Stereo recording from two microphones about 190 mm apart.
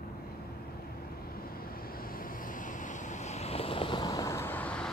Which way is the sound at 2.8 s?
40° left (ahead or behind).